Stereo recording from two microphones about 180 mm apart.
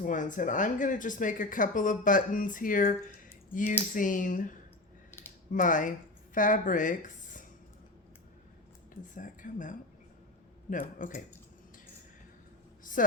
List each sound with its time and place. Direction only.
0.0 s speech: 45° left (ahead or behind)
3.9 s speech: 45° left (ahead or behind)
9.1 s speech: 45° left (ahead or behind)
12.8 s a sound: 50° left (ahead or behind)